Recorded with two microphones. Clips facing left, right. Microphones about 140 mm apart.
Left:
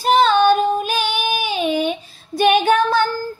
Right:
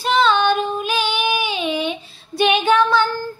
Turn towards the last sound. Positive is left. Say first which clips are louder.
# even
turn(degrees=45)  # may be behind; listen again after turning